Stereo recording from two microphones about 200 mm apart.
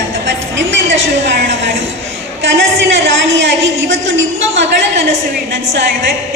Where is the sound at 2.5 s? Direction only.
65° right (ahead or behind).